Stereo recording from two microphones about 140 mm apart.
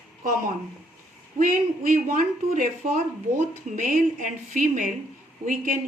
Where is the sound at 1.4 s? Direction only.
85° right.